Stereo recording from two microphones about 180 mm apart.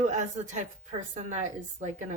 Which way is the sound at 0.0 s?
45° right (ahead or behind).